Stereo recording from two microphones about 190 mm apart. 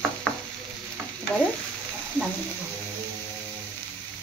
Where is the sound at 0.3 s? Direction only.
5° left (ahead or behind).